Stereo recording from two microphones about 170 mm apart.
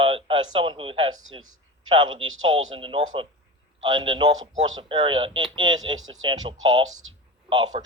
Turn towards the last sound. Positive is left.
turn(degrees=-25)  # may be behind; listen again after turning